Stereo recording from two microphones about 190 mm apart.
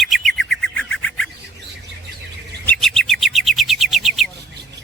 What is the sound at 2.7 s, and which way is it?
Bird, centre (ahead or behind).